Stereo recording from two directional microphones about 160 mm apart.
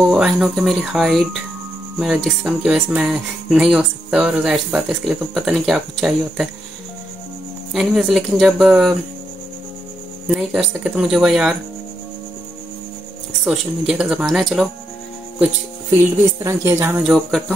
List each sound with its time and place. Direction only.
0.0 s speech: centre (ahead or behind)
7.7 s speech: 5° right (ahead or behind)
10.2 s speech: 5° right (ahead or behind)
13.4 s speech: 5° right (ahead or behind)
16.4 s a woman's voice: 15° right (ahead or behind)
17.0 s speech: centre (ahead or behind)